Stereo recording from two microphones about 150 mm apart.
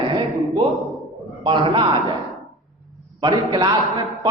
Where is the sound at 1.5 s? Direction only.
35° right (ahead or behind).